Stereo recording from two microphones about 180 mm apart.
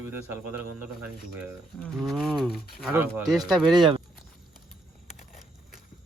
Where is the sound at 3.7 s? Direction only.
25° right (ahead or behind).